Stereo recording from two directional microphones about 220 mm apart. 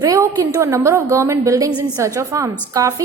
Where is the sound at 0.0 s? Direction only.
15° right (ahead or behind).